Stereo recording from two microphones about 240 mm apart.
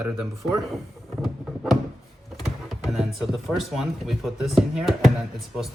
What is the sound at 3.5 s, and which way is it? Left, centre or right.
Speech, centre.